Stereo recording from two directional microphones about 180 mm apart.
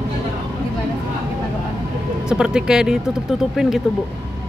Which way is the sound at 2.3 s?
5° right (ahead or behind).